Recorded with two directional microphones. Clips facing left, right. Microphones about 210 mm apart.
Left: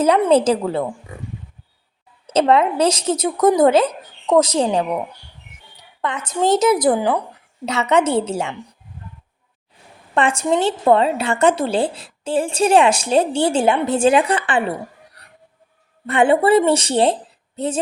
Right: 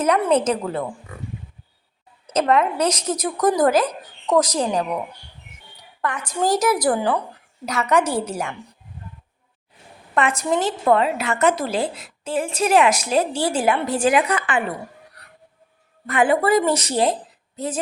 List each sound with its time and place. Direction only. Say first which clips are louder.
0.0 s a woman's voice: left 4 dB; 30° left (ahead or behind)
2.2 s a woman's voice: left 3 dB; 30° left (ahead or behind)
6.0 s a woman's voice: left 3 dB; 20° left (ahead or behind)
10.2 s a woman's voice: left 3 dB; 30° left (ahead or behind)
16.0 s a woman's voice: left 3 dB; 30° left (ahead or behind)